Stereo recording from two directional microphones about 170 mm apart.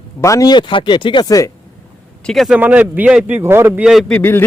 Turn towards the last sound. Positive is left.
turn(degrees=10)  # may be behind; listen again after turning